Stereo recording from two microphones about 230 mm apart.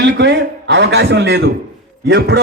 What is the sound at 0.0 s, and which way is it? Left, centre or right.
Speech, right.